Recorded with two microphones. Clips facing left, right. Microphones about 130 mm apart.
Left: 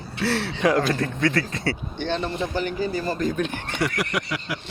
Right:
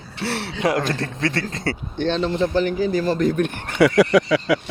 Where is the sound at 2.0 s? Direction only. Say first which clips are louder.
Right 7 dB; 90° right; by 3.6 s 50° right (ahead or behind).